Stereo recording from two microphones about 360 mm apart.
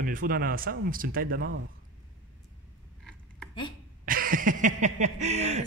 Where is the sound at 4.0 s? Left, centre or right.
Right.